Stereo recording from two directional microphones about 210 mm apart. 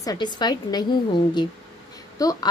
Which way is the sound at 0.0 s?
20° left (ahead or behind).